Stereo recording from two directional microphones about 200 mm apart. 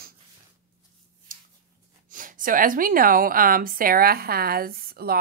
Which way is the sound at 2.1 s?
40° right (ahead or behind).